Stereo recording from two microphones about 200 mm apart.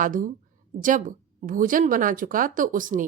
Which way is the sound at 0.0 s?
40° right (ahead or behind).